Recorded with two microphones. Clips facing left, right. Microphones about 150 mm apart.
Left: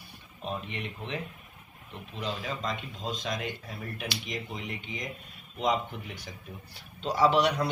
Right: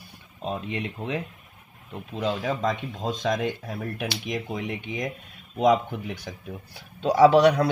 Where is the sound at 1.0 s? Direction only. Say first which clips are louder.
Right 6 dB; 40° right (ahead or behind).